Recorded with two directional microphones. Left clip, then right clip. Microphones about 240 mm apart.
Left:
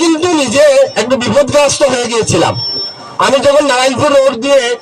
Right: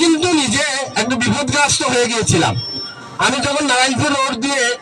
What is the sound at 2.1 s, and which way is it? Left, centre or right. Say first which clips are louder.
Speech: left 5 dB; right.